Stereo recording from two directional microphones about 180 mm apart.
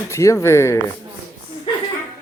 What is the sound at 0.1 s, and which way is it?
Speech, 15° left (ahead or behind).